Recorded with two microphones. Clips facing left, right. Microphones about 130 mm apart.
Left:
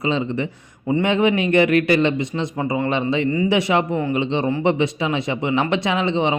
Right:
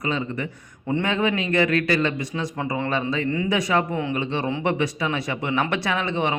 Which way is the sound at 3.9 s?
5° left (ahead or behind).